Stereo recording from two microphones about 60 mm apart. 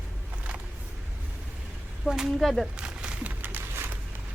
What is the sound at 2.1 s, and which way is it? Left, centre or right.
Speech, centre.